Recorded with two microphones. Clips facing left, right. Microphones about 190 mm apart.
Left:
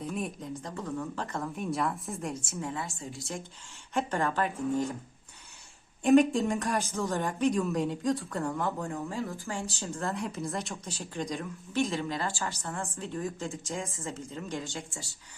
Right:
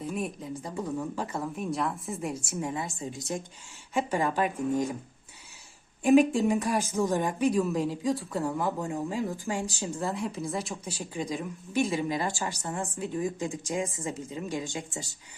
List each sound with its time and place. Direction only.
0.0 s a woman's voice: centre (ahead or behind)
0.6 s speech: 10° right (ahead or behind)
2.6 s speech: 15° right (ahead or behind)
6.0 s a woman's voice: centre (ahead or behind)
6.9 s a woman's voice: 15° right (ahead or behind)
10.0 s a woman's voice: centre (ahead or behind)
10.8 s speech: 15° right (ahead or behind)
11.7 s speech: 15° right (ahead or behind)